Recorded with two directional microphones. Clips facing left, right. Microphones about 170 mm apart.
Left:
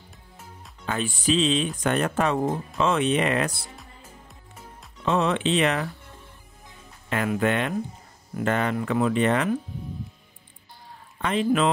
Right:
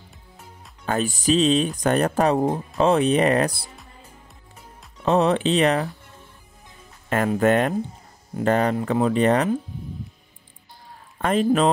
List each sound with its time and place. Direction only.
0.8 s speech: 40° right (ahead or behind)
5.0 s speech: 35° right (ahead or behind)
7.1 s speech: 45° right (ahead or behind)
11.1 s speech: 45° right (ahead or behind)